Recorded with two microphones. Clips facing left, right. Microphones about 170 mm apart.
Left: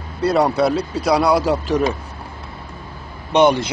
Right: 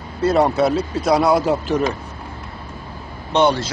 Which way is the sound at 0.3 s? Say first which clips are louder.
Even; centre (ahead or behind).